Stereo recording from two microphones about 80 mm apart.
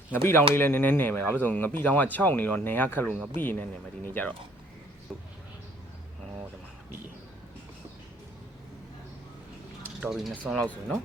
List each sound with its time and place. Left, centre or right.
0.1 s speech: left
10.0 s speech: centre